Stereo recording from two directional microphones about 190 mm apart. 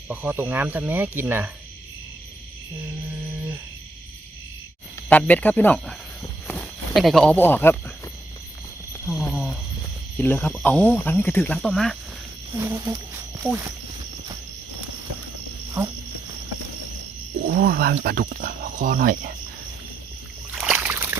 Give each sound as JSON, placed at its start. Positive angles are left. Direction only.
{"t": 0.1, "sound": "cricket", "side_deg": -10}
{"t": 5.0, "sound": "speech", "side_deg": 10}
{"t": 9.2, "sound": "a sound", "side_deg": 0}
{"t": 10.2, "sound": "speech", "side_deg": 10}
{"t": 12.5, "sound": "cricket", "side_deg": -15}
{"t": 13.5, "sound": "speech", "side_deg": -5}
{"t": 15.8, "sound": "cricket", "side_deg": -10}
{"t": 17.5, "sound": "speech", "side_deg": -55}
{"t": 20.6, "sound": "a sound", "side_deg": -10}